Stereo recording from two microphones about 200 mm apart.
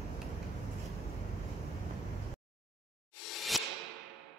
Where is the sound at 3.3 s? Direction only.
Centre (ahead or behind).